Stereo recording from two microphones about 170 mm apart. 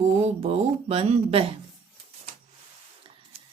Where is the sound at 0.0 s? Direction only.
40° right (ahead or behind).